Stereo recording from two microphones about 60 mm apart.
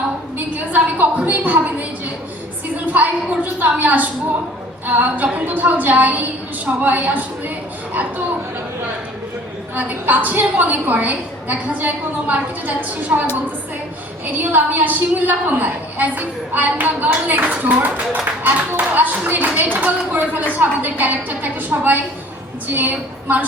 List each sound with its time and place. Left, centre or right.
0.3 s a woman's voice: right
9.7 s a woman's voice: right
14.3 s a woman's voice: right